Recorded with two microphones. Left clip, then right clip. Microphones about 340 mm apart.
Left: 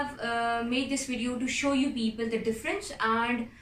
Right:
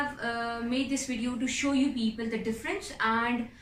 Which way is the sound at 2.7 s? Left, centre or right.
Centre.